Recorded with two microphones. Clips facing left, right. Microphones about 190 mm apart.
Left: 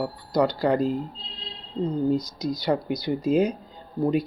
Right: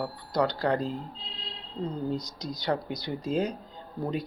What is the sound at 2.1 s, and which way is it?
Speech, 5° left (ahead or behind).